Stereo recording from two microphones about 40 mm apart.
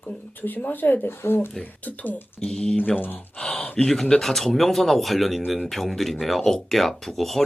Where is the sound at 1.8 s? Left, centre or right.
Left.